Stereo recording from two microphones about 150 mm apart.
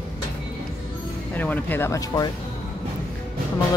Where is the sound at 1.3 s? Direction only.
10° left (ahead or behind).